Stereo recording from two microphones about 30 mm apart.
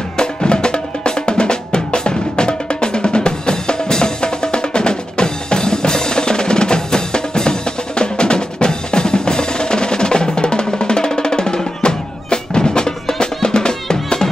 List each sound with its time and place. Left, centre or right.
0.2 s music: left